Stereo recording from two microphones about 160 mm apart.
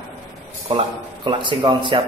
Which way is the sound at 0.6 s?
30° right (ahead or behind).